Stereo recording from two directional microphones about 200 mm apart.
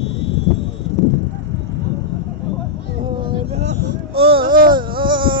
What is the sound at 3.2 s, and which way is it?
Vehicle, 30° right (ahead or behind).